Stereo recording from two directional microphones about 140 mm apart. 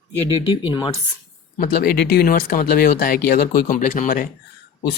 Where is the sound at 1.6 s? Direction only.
90° left; by 4.3 s 75° left (ahead or behind).